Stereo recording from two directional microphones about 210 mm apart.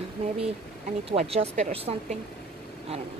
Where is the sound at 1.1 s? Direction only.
30° right (ahead or behind).